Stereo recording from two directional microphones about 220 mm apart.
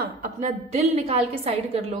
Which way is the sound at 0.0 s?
35° right (ahead or behind).